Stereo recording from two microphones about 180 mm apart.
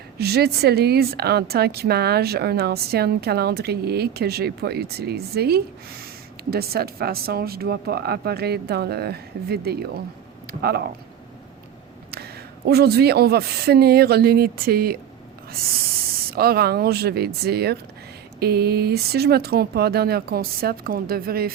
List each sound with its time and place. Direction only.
0.2 s a woman's voice: 65° right (ahead or behind)
12.1 s a woman's voice: 60° right (ahead or behind)
16.3 s a woman's voice: 60° right (ahead or behind)